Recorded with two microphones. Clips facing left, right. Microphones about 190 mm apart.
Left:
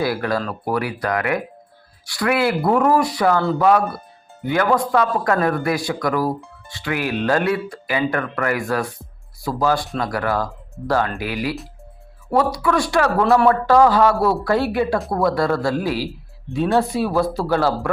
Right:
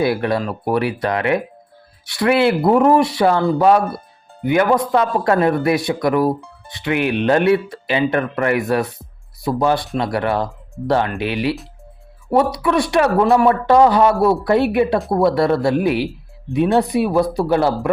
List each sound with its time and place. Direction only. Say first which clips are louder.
0.0 s a man's voice: right 3 dB; 25° right (ahead or behind)